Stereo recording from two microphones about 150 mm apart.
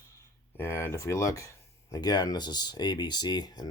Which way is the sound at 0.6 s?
15° left (ahead or behind).